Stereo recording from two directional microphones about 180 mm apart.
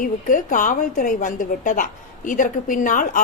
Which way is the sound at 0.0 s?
45° left (ahead or behind).